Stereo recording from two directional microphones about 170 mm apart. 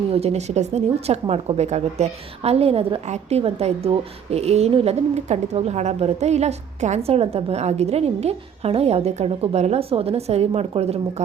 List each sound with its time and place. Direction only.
0.1 s speech: 40° right (ahead or behind)